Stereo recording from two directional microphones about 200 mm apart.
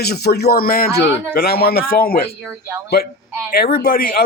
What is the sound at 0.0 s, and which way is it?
A man's voice, 55° left (ahead or behind).